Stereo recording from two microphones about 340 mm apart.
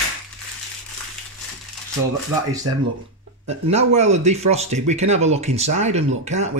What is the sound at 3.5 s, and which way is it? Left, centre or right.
Speech, centre.